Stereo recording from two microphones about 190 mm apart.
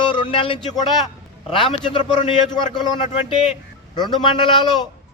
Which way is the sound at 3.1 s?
35° left (ahead or behind).